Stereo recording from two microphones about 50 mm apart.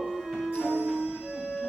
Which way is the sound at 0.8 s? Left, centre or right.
Right.